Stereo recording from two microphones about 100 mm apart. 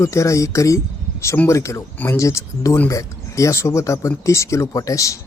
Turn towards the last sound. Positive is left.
turn(degrees=35)  # may be behind; listen again after turning